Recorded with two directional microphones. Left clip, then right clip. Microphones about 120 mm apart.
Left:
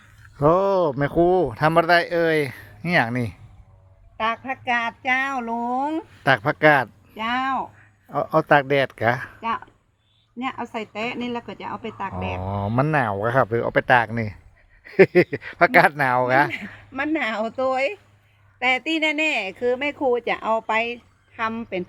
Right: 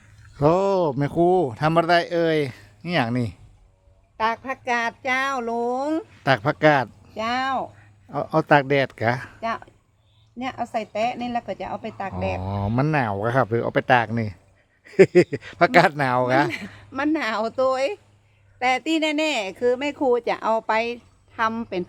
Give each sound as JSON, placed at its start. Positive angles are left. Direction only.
{"t": 0.0, "sound": "a sound", "side_deg": 0}
{"t": 0.5, "sound": "speech", "side_deg": -20}
{"t": 4.2, "sound": "speech", "side_deg": -35}
{"t": 6.2, "sound": "speech", "side_deg": -20}
{"t": 7.1, "sound": "speech", "side_deg": -40}
{"t": 8.1, "sound": "speech", "side_deg": -20}
{"t": 10.3, "sound": "speech", "side_deg": -40}
{"t": 12.4, "sound": "speech", "side_deg": -25}
{"t": 16.9, "sound": "speech", "side_deg": -40}